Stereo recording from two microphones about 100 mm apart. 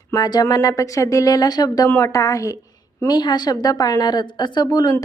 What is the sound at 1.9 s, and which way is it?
Speech, 25° left (ahead or behind).